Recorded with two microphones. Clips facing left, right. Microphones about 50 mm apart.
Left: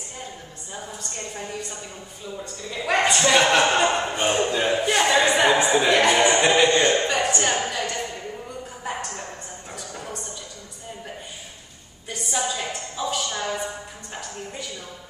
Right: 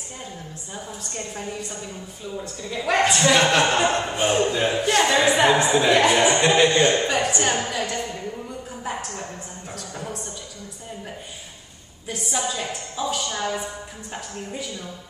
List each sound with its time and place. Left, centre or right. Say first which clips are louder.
1.1 s a woman's voice: right 2 dB; centre
8.8 s a sound: even; centre
12.1 s a woman's voice: even; centre